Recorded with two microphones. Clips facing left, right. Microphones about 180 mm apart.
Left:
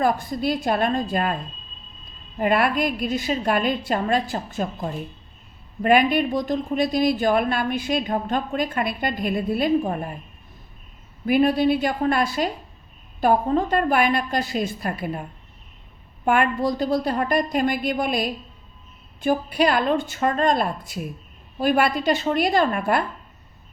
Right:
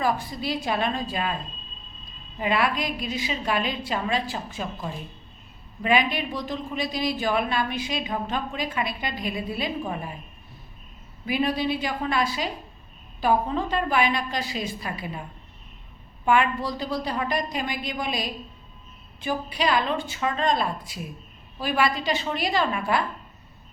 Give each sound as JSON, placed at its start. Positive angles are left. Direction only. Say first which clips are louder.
{"t": 0.0, "sound": "a woman's voice", "louder": "left 5 dB", "side_deg": 50}
{"t": 2.4, "sound": "a woman's voice", "louder": "left 5 dB", "side_deg": 50}
{"t": 11.3, "sound": "a woman's voice", "louder": "left 7 dB", "side_deg": 50}
{"t": 16.2, "sound": "a woman's voice", "louder": "left 2 dB", "side_deg": 50}